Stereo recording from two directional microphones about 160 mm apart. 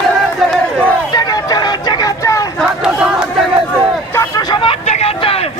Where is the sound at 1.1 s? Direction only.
25° left (ahead or behind).